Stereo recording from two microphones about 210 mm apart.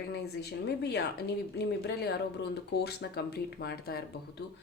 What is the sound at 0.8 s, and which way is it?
Speech, 50° left (ahead or behind).